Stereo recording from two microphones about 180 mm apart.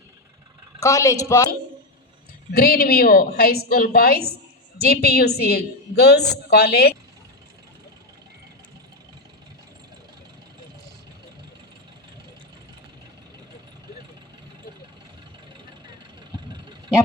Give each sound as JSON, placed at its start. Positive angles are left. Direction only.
{"t": 0.8, "sound": "a woman's voice", "side_deg": 15}
{"t": 2.5, "sound": "a woman's voice", "side_deg": 55}
{"t": 16.3, "sound": "vehicle", "side_deg": -25}